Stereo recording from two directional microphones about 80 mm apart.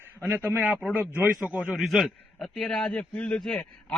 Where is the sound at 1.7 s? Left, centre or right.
Centre.